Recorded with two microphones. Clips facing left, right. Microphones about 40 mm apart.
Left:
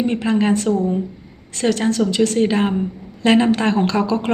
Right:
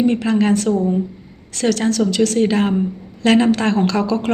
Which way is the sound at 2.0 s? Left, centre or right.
Left.